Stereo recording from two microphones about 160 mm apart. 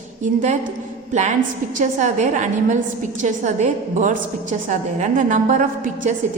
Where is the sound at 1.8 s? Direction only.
50° right (ahead or behind).